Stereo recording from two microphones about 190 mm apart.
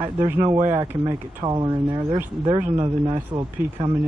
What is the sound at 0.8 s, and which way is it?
Speech, 20° right (ahead or behind).